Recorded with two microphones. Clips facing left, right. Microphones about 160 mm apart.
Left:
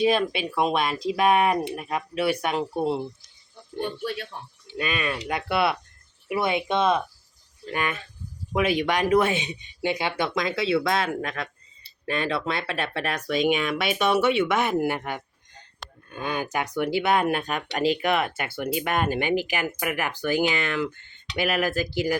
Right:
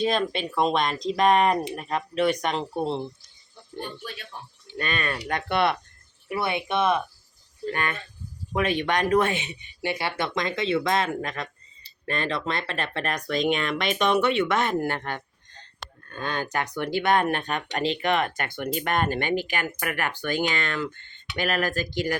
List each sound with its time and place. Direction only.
0.0 s speech: 10° left (ahead or behind)
4.0 s speech: 60° left (ahead or behind)
4.8 s speech: 5° left (ahead or behind)
6.2 s speech: 15° left (ahead or behind)